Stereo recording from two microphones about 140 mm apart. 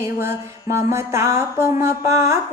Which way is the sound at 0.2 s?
20° right (ahead or behind).